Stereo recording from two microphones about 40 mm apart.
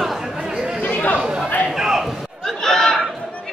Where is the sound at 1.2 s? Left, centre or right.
Centre.